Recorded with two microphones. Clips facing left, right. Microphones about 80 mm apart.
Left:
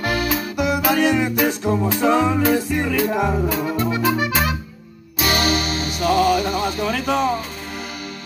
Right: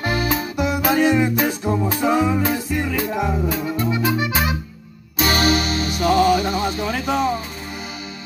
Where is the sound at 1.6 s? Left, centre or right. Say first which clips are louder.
Left 2 dB; centre.